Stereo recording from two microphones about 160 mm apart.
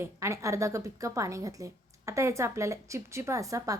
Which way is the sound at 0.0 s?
20° right (ahead or behind).